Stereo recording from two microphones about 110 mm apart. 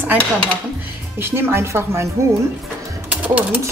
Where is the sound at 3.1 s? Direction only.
15° right (ahead or behind).